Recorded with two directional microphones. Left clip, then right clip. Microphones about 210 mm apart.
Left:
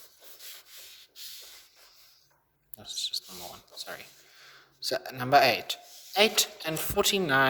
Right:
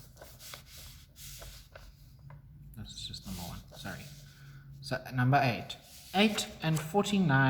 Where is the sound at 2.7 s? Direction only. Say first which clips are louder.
Left 10 dB; 50° left (ahead or behind).